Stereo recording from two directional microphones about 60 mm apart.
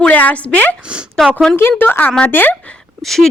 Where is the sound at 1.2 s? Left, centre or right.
Centre.